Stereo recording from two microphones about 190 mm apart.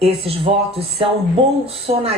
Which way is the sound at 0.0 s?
30° right (ahead or behind).